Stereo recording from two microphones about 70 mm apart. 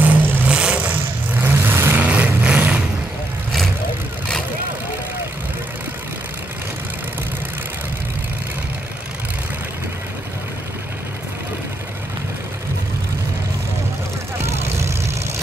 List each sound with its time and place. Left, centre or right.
0.0 s vehicle: right
1.4 s vehicle: right
2.0 s vehicle: right
14.4 s vehicle: right